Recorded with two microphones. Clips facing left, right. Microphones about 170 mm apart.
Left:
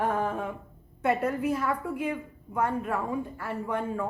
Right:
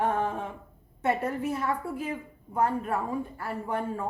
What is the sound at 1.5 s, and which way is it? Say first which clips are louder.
A woman's voice: left 1 dB; 30° right (ahead or behind).